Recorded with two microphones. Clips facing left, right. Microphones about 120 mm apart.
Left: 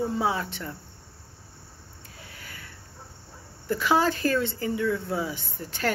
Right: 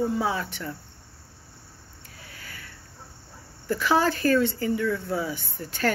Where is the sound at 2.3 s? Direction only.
20° left (ahead or behind).